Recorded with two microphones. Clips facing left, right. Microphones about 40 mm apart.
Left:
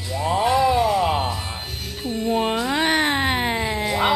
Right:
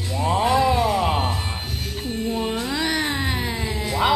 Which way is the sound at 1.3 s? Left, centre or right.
Centre.